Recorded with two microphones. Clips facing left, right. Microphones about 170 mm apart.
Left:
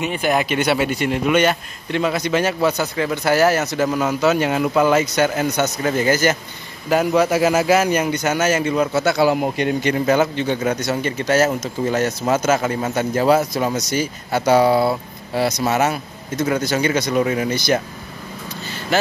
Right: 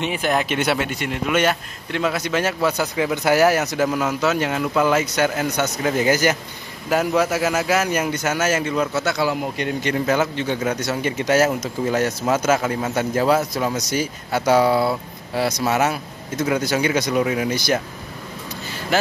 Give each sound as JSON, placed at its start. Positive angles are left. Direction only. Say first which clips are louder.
{"t": 0.0, "sound": "a man's voice", "louder": "left 2 dB", "side_deg": 5}
{"t": 3.8, "sound": "a man's voice", "louder": "left 4 dB", "side_deg": 0}
{"t": 6.9, "sound": "a man's voice", "louder": "left 3 dB", "side_deg": 0}
{"t": 7.3, "sound": "speech", "louder": "left 4 dB", "side_deg": 15}
{"t": 7.9, "sound": "a man's voice", "louder": "left 3 dB", "side_deg": -5}
{"t": 9.8, "sound": "a man's voice", "louder": "left 2 dB", "side_deg": 5}
{"t": 11.0, "sound": "a man's voice", "louder": "right 1 dB", "side_deg": -15}